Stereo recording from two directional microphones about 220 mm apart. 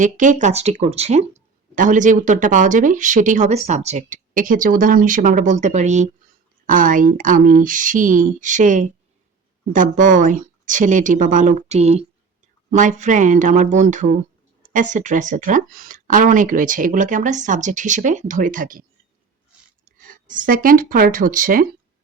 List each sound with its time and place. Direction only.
0.0 s speech: 35° right (ahead or behind)
14.6 s a sound: 35° right (ahead or behind)
14.9 s speech: 35° right (ahead or behind)
20.0 s speech: 40° right (ahead or behind)